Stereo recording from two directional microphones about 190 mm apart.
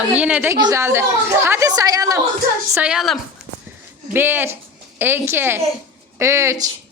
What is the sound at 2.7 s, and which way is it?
A woman's voice, 5° right (ahead or behind).